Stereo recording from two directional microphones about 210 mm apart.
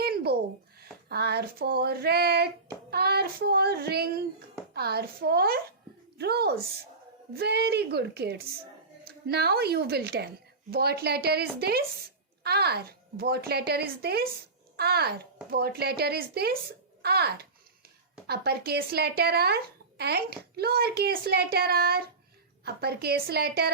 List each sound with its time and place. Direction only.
0.0 s a sound: 50° right (ahead or behind)
0.8 s child singing: 50° right (ahead or behind)
2.9 s a woman's voice: 50° right (ahead or behind)